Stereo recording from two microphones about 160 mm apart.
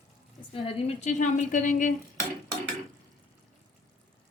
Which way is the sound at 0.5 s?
35° left (ahead or behind).